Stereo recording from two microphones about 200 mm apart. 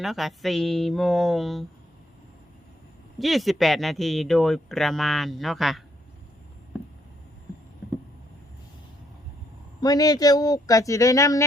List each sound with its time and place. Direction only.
0.0 s speech: centre (ahead or behind)
3.2 s speech: centre (ahead or behind)
9.8 s speech: 20° left (ahead or behind)